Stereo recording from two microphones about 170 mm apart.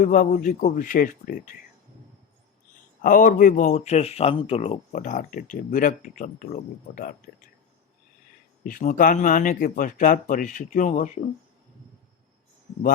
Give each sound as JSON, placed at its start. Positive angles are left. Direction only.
{"t": 0.0, "sound": "speech", "side_deg": 50}
{"t": 3.0, "sound": "speech", "side_deg": 55}
{"t": 8.6, "sound": "speech", "side_deg": 50}